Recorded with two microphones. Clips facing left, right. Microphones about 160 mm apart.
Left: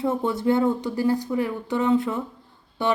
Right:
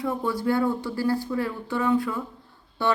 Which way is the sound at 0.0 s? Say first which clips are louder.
Left 3 dB; 25° left (ahead or behind).